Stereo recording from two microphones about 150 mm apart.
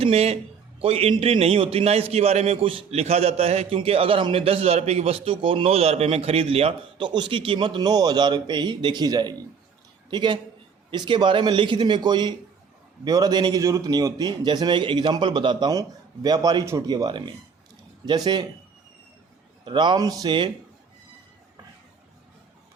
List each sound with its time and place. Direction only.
0.0 s a man's voice: 45° right (ahead or behind)
19.6 s a man's voice: 30° right (ahead or behind)